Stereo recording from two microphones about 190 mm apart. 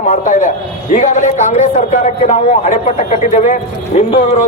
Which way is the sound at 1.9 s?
35° left (ahead or behind).